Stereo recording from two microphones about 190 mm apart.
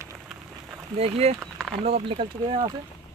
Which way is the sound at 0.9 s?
35° right (ahead or behind).